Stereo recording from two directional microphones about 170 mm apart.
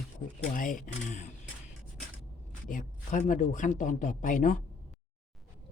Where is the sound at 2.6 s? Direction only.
50° left (ahead or behind).